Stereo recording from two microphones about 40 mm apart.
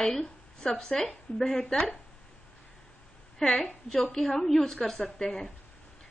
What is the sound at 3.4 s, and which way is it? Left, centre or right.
A woman's voice, centre.